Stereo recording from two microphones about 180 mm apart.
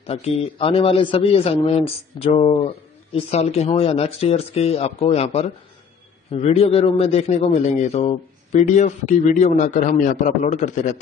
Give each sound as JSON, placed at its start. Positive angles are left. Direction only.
{"t": 0.0, "sound": "a man's voice", "side_deg": 35}